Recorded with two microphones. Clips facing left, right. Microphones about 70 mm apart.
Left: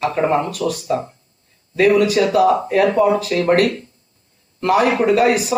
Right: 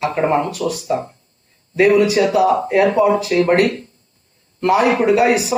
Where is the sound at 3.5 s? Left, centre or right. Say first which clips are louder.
Left 1 dB; right.